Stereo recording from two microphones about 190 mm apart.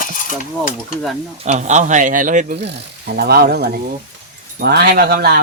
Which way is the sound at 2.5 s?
60° right (ahead or behind).